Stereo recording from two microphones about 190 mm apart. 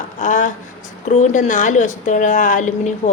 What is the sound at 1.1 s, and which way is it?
A woman's voice, 40° left (ahead or behind).